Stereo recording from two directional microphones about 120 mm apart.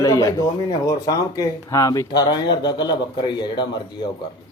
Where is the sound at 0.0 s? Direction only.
30° left (ahead or behind).